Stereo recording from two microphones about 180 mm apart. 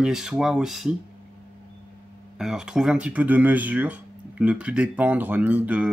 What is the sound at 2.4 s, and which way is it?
Speech, 5° right (ahead or behind).